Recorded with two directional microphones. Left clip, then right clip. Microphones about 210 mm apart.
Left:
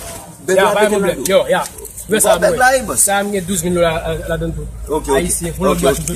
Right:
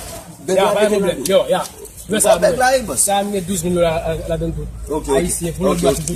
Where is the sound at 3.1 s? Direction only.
15° left (ahead or behind); by 5.8 s 5° right (ahead or behind).